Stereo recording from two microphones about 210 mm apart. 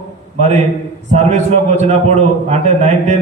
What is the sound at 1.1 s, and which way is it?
A man's voice, 35° right (ahead or behind).